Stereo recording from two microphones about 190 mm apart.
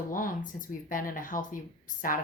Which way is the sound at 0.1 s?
45° left (ahead or behind).